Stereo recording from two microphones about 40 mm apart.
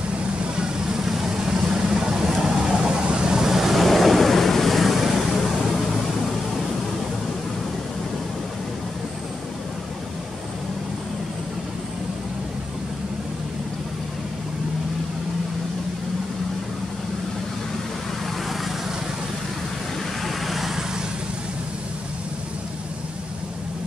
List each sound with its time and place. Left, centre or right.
0.6 s vehicle: centre
20.2 s vehicle: centre